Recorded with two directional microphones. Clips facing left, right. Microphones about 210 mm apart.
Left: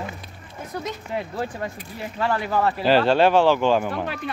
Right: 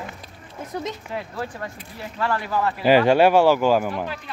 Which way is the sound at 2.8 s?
10° right (ahead or behind).